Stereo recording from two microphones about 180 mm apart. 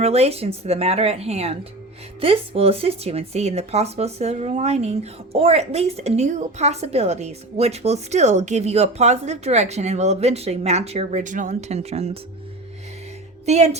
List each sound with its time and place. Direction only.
0.0 s speech: 35° right (ahead or behind)
13.4 s a woman's voice: 40° right (ahead or behind)